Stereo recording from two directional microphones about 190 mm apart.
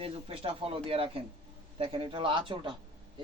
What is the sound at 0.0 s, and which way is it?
Speech, 30° right (ahead or behind).